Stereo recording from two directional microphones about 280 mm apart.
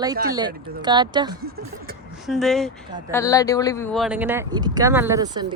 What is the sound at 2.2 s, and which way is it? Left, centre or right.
Speech, centre.